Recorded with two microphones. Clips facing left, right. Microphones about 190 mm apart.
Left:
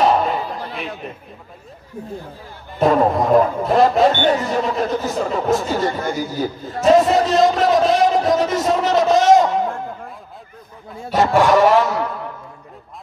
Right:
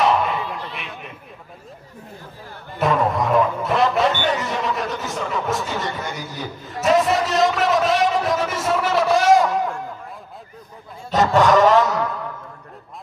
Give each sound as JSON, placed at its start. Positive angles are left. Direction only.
{"t": 0.1, "sound": "a sound", "side_deg": 30}
{"t": 2.8, "sound": "speech", "side_deg": 35}
{"t": 8.1, "sound": "a man's voice", "side_deg": 40}
{"t": 11.1, "sound": "dog", "side_deg": 10}